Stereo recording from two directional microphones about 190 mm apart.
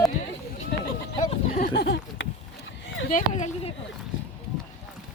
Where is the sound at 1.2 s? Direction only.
45° left (ahead or behind).